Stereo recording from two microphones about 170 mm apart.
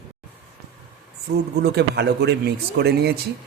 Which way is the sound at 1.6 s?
80° right.